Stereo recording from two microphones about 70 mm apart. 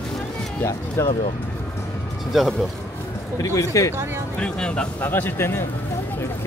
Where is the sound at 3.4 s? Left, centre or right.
Left.